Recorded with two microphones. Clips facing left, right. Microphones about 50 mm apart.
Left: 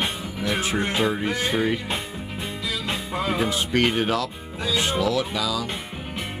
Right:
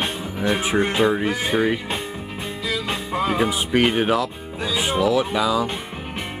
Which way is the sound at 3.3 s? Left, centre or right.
Centre.